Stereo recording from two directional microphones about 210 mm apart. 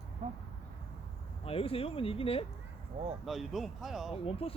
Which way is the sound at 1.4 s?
25° left (ahead or behind).